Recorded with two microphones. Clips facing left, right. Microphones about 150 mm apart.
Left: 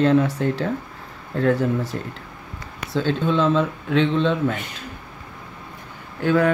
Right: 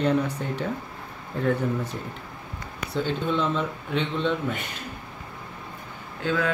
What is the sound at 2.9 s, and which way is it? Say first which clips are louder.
Speech: left 5 dB; 90° left.